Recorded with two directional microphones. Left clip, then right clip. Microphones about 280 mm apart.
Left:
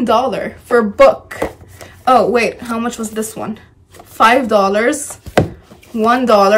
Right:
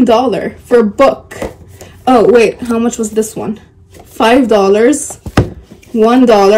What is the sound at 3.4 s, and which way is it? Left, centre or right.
Speech, left.